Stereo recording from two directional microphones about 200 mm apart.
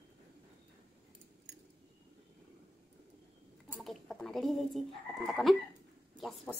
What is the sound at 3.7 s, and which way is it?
Speech, centre (ahead or behind).